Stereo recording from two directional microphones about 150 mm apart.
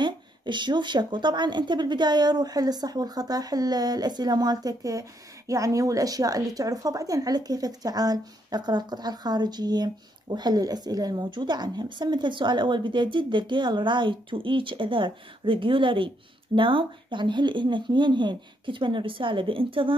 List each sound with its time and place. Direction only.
0.0 s a woman's voice: 30° right (ahead or behind)